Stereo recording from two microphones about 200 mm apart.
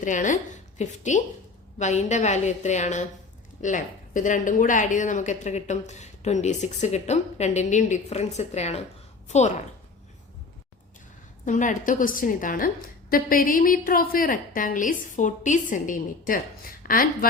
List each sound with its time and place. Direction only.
0.0 s a woman's voice: 40° left (ahead or behind)
11.4 s a woman's voice: 40° left (ahead or behind)